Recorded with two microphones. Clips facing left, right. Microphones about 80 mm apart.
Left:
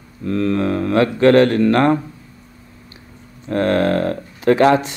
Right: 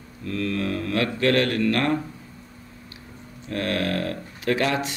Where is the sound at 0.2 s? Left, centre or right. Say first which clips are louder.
Left 8 dB; left.